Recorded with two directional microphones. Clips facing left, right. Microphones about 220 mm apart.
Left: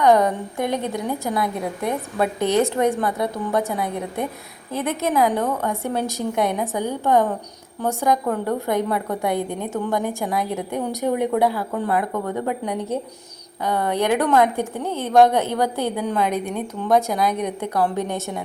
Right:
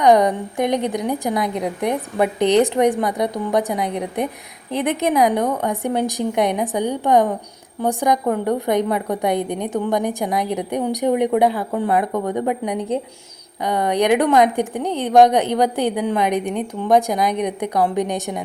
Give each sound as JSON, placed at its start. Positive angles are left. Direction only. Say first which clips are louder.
{"t": 0.0, "sound": "a woman's voice", "louder": "right 2 dB", "side_deg": -15}